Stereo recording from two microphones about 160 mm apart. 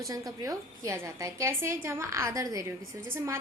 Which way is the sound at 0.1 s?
20° right (ahead or behind).